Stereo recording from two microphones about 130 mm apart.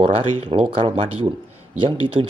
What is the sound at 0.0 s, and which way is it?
Speech, 45° right (ahead or behind).